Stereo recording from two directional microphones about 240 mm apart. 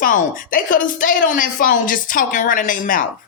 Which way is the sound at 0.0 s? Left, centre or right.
Left.